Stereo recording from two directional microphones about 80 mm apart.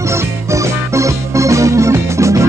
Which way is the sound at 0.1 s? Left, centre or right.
Right.